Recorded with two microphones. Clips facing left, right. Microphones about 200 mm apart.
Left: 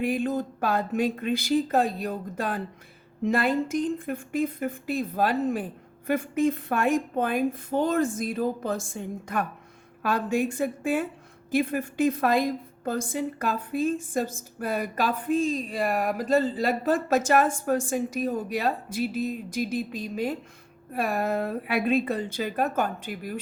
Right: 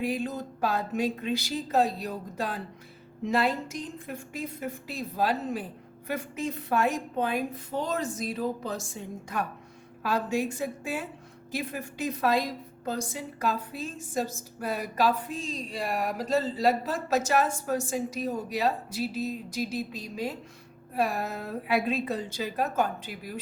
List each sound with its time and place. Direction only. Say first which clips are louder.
0.0 s a woman's voice: left 4 dB; 55° left (ahead or behind)